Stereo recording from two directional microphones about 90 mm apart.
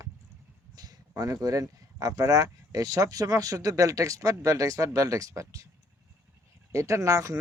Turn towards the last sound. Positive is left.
turn(degrees=-35)  # may be behind; listen again after turning